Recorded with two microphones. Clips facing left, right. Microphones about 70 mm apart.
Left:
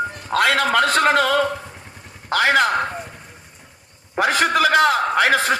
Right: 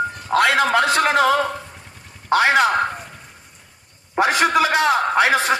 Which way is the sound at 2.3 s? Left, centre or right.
Centre.